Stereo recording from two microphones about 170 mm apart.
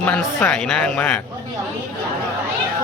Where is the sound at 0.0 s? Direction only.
10° left (ahead or behind).